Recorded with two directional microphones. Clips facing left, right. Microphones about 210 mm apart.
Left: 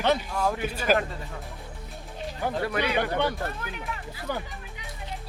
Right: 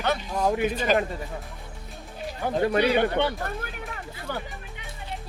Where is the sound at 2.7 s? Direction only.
30° right (ahead or behind).